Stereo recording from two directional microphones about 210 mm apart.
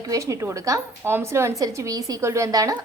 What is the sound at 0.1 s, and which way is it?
A woman's voice, 15° right (ahead or behind).